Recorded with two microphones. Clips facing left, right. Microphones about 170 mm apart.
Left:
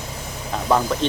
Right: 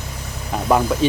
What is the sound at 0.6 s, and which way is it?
Speech, 10° right (ahead or behind).